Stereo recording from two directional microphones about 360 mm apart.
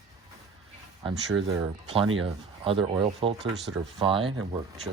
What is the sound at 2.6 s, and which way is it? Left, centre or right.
Speech, centre.